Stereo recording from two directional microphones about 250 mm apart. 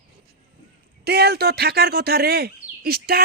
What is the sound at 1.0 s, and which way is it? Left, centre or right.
Speech, right.